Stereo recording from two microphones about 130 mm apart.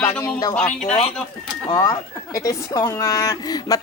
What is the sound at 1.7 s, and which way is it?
Speech, 25° left (ahead or behind).